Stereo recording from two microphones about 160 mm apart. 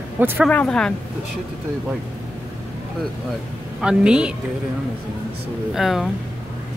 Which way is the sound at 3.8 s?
5° right (ahead or behind).